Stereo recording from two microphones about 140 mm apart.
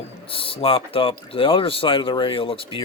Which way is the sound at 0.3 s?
40° left (ahead or behind).